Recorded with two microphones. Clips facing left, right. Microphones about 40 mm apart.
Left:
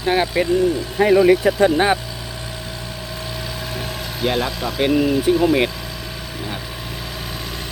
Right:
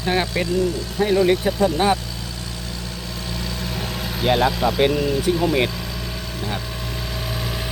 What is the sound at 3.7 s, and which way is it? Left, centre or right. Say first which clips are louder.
Vehicle: even; centre.